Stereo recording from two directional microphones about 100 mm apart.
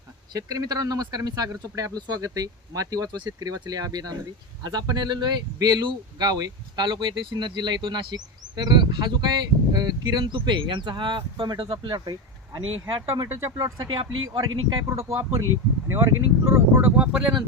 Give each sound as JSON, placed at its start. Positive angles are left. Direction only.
{"t": 0.3, "sound": "speech", "side_deg": -40}
{"t": 13.2, "sound": "speech", "side_deg": -35}
{"t": 13.9, "sound": "speech", "side_deg": -45}
{"t": 17.0, "sound": "speech", "side_deg": -5}